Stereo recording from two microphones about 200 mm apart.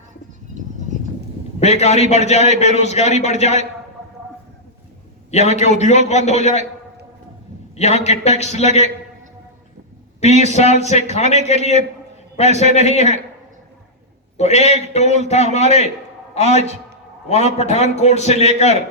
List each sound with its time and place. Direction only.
1.5 s a man's voice: 35° left (ahead or behind)
5.3 s a man's voice: 35° left (ahead or behind)
7.8 s a man's voice: 35° left (ahead or behind)
10.2 s a man's voice: 35° left (ahead or behind)
14.3 s a man's voice: 35° left (ahead or behind)